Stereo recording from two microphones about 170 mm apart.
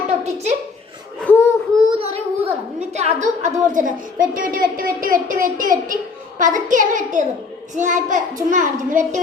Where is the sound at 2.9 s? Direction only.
40° right (ahead or behind).